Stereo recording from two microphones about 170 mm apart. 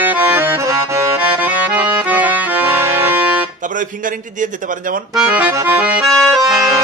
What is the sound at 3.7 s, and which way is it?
A man's voice, 50° right (ahead or behind).